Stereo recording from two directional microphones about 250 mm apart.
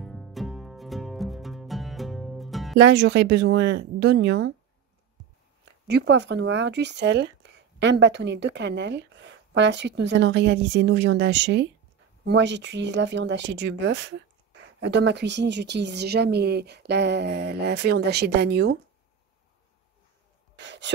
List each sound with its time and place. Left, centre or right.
0.0 s music: centre
2.9 s speech: right
5.9 s speech: right
20.5 s a sound: right